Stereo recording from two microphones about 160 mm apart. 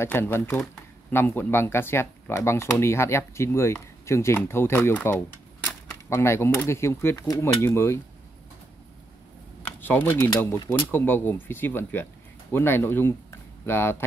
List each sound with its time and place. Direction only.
0.0 s speech: 15° left (ahead or behind)
9.8 s speech: 10° left (ahead or behind)